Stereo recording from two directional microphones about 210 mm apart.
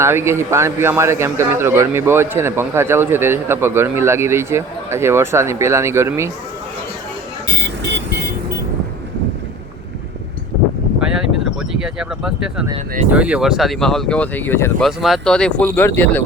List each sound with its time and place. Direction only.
0.0 s a man's voice: 10° right (ahead or behind)
7.4 s vehicle: 50° right (ahead or behind)
11.0 s a sound: 5° right (ahead or behind)
13.1 s speech: 5° right (ahead or behind)